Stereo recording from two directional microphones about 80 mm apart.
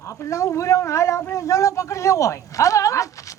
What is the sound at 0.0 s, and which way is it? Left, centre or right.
Speech, left.